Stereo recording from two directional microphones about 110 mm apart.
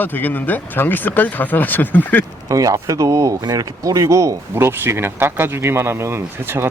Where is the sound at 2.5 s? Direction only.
30° right (ahead or behind).